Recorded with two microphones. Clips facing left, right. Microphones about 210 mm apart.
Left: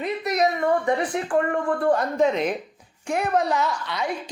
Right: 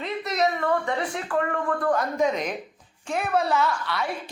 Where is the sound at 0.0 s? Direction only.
15° left (ahead or behind).